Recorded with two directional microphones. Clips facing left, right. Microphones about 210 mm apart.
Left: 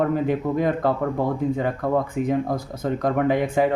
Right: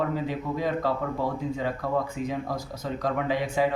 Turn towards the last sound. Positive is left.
turn(degrees=55)  # may be behind; listen again after turning